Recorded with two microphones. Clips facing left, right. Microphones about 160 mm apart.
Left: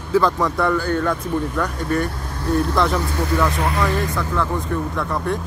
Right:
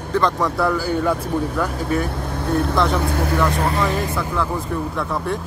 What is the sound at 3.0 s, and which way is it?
Speech, 55° right (ahead or behind).